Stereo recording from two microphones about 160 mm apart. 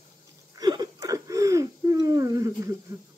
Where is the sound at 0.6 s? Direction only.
25° right (ahead or behind).